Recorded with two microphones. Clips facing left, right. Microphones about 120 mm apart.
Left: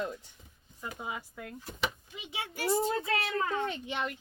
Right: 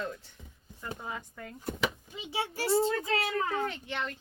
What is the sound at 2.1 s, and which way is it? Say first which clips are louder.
A child's voice: right 5 dB; 30° right (ahead or behind).